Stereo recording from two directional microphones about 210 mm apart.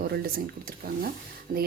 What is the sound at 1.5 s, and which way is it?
Speech, 45° right (ahead or behind).